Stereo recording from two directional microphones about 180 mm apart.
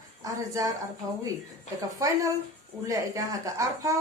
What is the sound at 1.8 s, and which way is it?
Speech, 20° right (ahead or behind).